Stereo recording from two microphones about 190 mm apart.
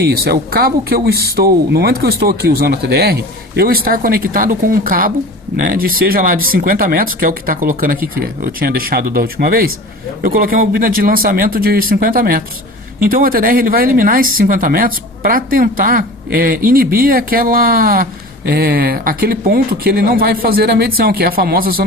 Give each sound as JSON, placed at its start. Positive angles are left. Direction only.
{"t": 0.0, "sound": "speech", "side_deg": -55}